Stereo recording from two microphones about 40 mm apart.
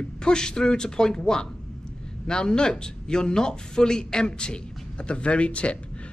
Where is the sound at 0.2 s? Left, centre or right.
Centre.